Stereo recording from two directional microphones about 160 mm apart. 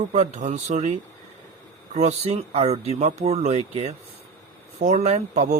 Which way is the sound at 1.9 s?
45° right (ahead or behind).